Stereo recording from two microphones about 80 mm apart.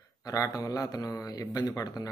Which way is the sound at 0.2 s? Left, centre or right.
Left.